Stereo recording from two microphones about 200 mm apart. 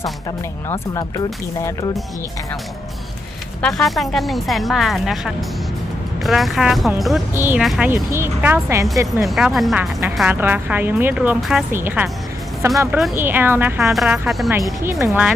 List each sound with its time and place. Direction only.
0.0 s speech: 20° left (ahead or behind)
3.6 s speech: centre (ahead or behind)
7.3 s speech: 10° right (ahead or behind)
9.2 s speech: centre (ahead or behind)
13.1 s speech: 10° right (ahead or behind)